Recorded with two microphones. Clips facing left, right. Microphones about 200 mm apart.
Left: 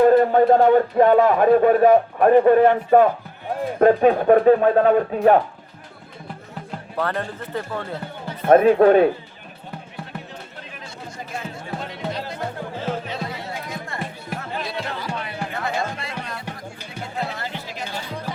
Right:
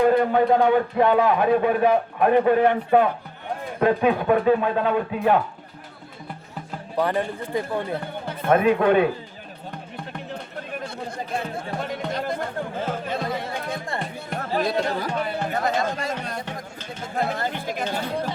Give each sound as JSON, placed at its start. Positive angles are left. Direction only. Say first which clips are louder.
{"t": 0.0, "sound": "speech", "louder": "left 4 dB", "side_deg": 45}
{"t": 6.9, "sound": "a man's voice", "louder": "right 3 dB", "side_deg": -15}
{"t": 8.4, "sound": "speech", "louder": "left 5 dB", "side_deg": 45}
{"t": 10.7, "sound": "chatter", "louder": "right 7 dB", "side_deg": -55}
{"t": 11.5, "sound": "music", "louder": "right 3 dB", "side_deg": -50}
{"t": 13.7, "sound": "music", "louder": "right 3 dB", "side_deg": -30}
{"t": 14.5, "sound": "a sound", "louder": "right 8 dB", "side_deg": -45}
{"t": 17.2, "sound": "music", "louder": "right 4 dB", "side_deg": -50}